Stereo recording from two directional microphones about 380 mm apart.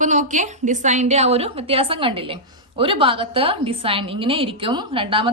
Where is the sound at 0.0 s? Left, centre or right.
Centre.